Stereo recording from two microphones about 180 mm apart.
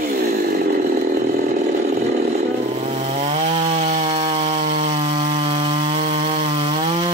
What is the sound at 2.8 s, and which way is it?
Chainsaw, 40° right (ahead or behind).